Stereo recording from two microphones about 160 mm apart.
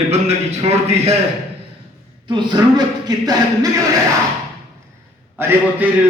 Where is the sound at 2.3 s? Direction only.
30° right (ahead or behind).